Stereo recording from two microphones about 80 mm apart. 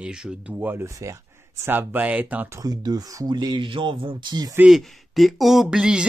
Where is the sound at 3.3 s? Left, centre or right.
Right.